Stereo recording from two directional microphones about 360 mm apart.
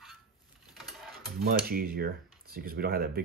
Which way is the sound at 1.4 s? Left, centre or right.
Right.